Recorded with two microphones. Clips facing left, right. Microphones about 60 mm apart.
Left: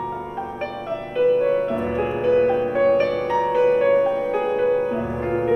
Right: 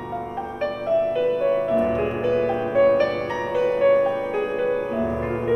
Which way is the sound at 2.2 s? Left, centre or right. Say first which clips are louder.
Left 5 dB; centre.